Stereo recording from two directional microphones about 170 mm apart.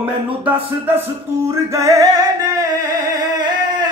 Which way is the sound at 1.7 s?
20° right (ahead or behind).